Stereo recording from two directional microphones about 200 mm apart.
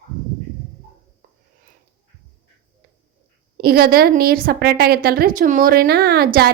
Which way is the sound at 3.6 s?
50° right (ahead or behind).